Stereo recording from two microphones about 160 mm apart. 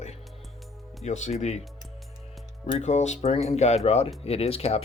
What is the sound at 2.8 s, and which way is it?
Speech, 45° left (ahead or behind).